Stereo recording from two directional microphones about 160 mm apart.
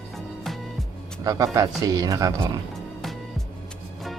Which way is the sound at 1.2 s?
20° right (ahead or behind).